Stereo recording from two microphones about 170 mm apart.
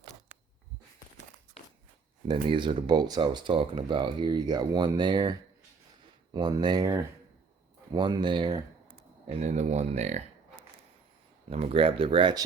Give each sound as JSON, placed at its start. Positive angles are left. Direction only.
{"t": 2.2, "sound": "speech", "side_deg": -30}
{"t": 9.2, "sound": "speech", "side_deg": -40}
{"t": 11.5, "sound": "speech", "side_deg": -35}